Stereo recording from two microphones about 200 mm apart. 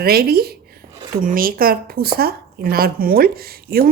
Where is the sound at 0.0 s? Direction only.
50° right (ahead or behind).